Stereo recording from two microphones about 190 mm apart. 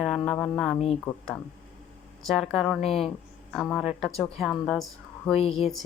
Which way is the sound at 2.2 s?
Centre (ahead or behind).